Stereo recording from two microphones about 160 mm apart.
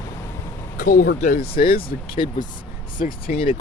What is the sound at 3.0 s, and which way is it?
Speech, 60° left (ahead or behind).